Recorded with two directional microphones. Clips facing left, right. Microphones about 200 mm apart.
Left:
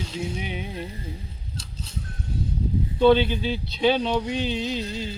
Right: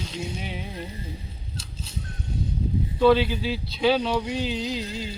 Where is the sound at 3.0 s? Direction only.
25° left (ahead or behind).